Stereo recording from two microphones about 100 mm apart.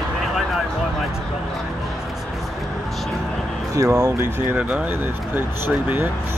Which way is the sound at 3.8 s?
30° right (ahead or behind).